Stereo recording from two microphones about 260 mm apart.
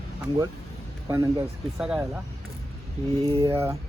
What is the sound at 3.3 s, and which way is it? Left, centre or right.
Speech, centre.